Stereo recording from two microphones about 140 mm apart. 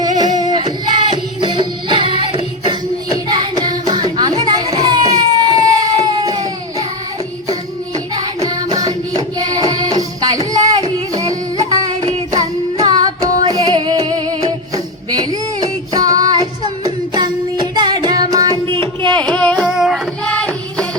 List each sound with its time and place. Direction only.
0.2 s singing: 30° right (ahead or behind)
1.4 s music: 35° right (ahead or behind)
3.1 s child singing: 30° right (ahead or behind)
8.1 s music: 30° right (ahead or behind)
12.3 s child singing: 30° right (ahead or behind)
13.5 s music: 30° right (ahead or behind)
18.7 s a sound: 40° right (ahead or behind)
19.1 s singing: 10° left (ahead or behind)
19.5 s a sound: 5° right (ahead or behind)
20.2 s music: 10° left (ahead or behind)